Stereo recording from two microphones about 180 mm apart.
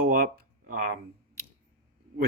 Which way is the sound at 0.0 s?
55° right (ahead or behind).